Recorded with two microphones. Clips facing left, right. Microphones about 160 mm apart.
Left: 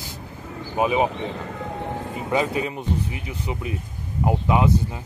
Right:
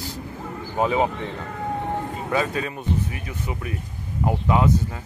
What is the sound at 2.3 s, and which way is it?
Speech, 20° left (ahead or behind).